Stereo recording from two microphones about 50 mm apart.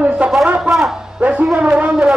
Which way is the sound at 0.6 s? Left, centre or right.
Centre.